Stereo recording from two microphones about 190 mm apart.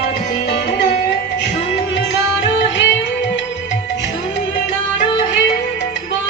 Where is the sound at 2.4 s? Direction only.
75° left (ahead or behind).